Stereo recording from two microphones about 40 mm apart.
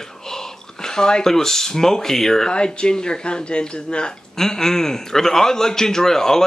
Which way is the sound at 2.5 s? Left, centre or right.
Left.